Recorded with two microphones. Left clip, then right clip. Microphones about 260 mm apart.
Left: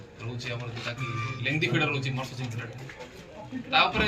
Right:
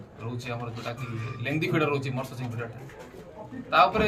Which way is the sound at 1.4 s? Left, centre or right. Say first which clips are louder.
Right 1 dB; centre.